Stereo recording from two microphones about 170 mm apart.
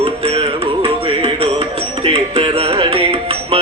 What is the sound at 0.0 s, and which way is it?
Music, 40° right (ahead or behind).